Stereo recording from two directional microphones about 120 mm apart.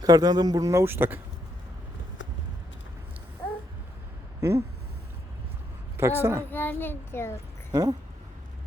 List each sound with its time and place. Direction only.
0.0 s speech: 30° right (ahead or behind)
4.4 s a sound: 25° right (ahead or behind)
6.0 s speech: 20° right (ahead or behind)
6.5 s a child's voice: 15° left (ahead or behind)
7.7 s speech: 35° right (ahead or behind)